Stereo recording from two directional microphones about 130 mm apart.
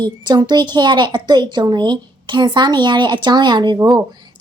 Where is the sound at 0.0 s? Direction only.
35° right (ahead or behind).